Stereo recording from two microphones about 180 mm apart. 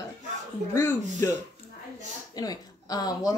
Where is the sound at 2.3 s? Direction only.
20° left (ahead or behind).